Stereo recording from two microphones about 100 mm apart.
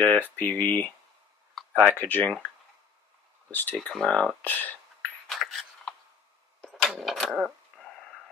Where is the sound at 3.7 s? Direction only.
5° left (ahead or behind).